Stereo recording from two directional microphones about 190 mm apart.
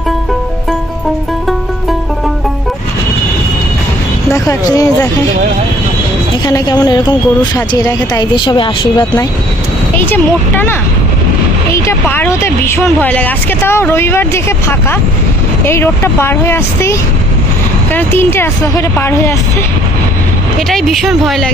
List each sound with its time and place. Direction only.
6.4 s speech: 20° left (ahead or behind)
9.9 s speech: 10° left (ahead or behind)
17.9 s speech: 10° left (ahead or behind)
20.7 s speech: centre (ahead or behind)